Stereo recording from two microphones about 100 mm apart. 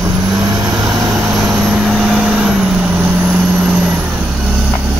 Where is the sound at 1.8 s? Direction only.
5° right (ahead or behind).